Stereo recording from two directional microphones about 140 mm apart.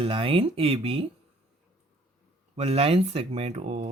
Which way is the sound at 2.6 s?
45° right (ahead or behind).